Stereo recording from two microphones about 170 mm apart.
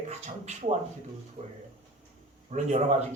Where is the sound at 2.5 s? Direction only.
45° right (ahead or behind).